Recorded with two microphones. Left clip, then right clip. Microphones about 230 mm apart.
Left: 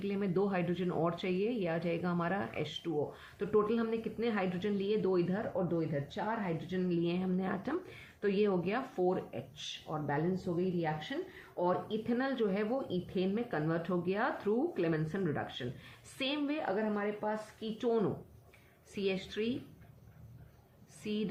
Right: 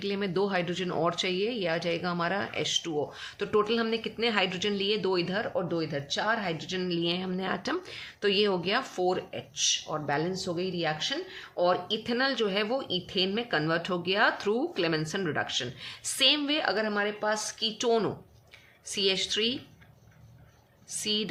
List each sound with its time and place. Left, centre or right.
0.0 s speech: right
21.0 s speech: right